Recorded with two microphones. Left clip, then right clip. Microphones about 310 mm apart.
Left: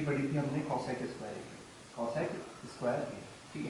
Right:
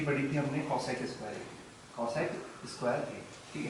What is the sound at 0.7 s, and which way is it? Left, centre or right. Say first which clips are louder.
Speech: right 2 dB; left.